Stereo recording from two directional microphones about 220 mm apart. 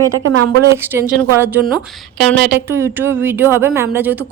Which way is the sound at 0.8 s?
10° right (ahead or behind).